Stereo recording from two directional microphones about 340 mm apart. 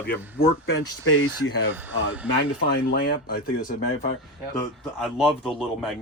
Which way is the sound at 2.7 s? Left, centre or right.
Left.